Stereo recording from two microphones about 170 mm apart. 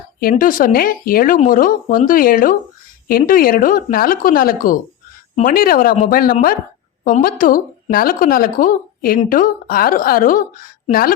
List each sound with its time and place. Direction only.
0.2 s speech: 55° left (ahead or behind)